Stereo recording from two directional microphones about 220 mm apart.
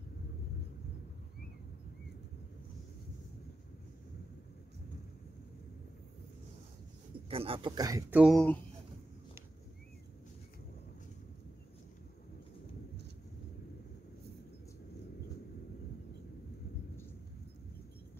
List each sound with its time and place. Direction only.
7.2 s speech: 25° right (ahead or behind); by 8.5 s centre (ahead or behind)